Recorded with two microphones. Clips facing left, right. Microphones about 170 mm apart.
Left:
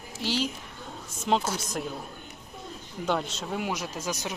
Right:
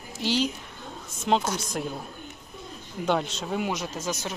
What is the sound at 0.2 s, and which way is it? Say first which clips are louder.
Speech: right 3 dB; 5° left (ahead or behind).